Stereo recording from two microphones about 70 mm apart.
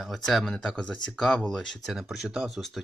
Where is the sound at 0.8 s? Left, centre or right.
Centre.